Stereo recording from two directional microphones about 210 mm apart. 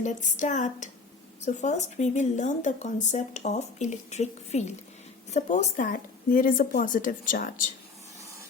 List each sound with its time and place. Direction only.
0.0 s speech: 35° left (ahead or behind)